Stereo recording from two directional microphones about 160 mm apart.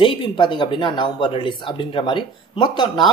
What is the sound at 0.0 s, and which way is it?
Speech, 30° left (ahead or behind).